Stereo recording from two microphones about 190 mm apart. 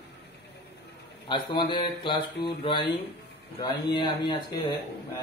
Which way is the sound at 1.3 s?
25° left (ahead or behind).